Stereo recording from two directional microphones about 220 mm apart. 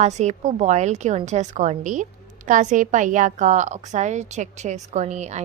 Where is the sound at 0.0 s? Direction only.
30° right (ahead or behind).